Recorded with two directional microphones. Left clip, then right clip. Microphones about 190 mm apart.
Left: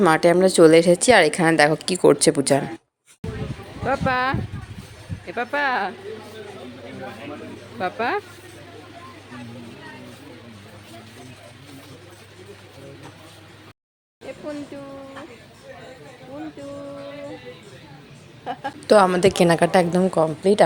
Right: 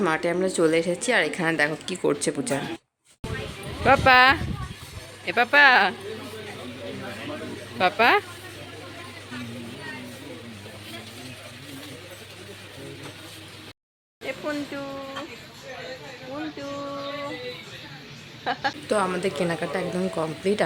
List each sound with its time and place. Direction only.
0.0 s a woman's voice: 35° left (ahead or behind)
3.8 s speech: centre (ahead or behind)
7.8 s speech: centre (ahead or behind)
14.3 s a sound: 15° right (ahead or behind)
18.5 s speech: 5° right (ahead or behind)
18.9 s a woman's voice: 35° left (ahead or behind)
20.2 s speech: 20° left (ahead or behind)